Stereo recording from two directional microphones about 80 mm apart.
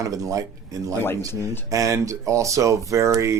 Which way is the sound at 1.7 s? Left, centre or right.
Right.